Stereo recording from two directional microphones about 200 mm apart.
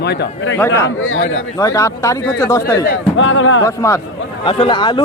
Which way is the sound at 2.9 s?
70° left (ahead or behind).